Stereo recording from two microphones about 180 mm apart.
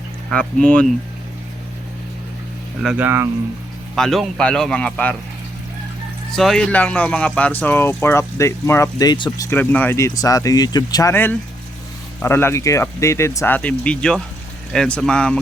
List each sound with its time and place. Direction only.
0.3 s speech: 5° left (ahead or behind)
2.8 s speech: 10° right (ahead or behind)
3.9 s speech: centre (ahead or behind)
6.3 s speech: centre (ahead or behind); by 9.5 s 25° left (ahead or behind)
9.5 s speech: 10° left (ahead or behind)